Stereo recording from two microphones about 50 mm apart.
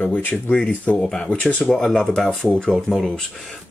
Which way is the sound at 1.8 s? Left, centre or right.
Centre.